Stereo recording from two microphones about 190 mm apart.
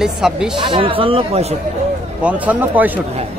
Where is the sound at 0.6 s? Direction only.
25° right (ahead or behind).